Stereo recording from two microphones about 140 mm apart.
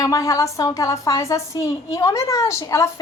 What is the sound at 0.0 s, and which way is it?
A woman's voice, 25° left (ahead or behind).